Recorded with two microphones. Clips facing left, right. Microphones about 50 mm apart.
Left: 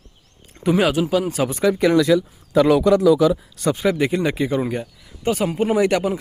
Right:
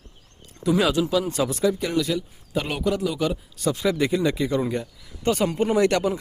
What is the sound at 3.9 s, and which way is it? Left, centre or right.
Speech, left.